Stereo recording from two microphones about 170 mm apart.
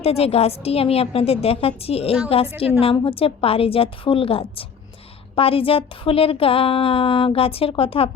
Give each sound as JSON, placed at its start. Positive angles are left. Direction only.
{"t": 0.0, "sound": "a woman's voice", "side_deg": 35}